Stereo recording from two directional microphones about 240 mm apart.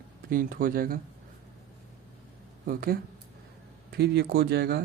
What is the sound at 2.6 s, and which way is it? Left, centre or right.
Speech, right.